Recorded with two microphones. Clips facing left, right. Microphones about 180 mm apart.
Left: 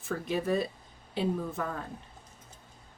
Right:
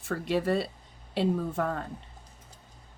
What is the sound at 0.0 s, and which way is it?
Speech, 80° right.